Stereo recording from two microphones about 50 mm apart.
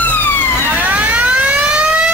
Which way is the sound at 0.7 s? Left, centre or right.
Right.